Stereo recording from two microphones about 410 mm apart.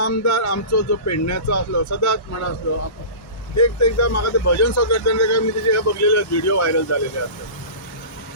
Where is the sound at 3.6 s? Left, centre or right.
Left.